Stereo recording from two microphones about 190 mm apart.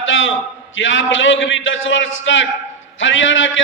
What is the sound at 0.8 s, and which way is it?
A man's voice, 85° left.